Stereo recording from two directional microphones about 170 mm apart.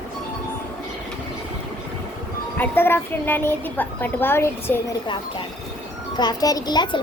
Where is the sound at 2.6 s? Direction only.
10° left (ahead or behind).